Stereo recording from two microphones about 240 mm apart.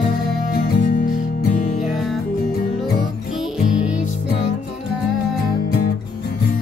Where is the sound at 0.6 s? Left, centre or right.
Left.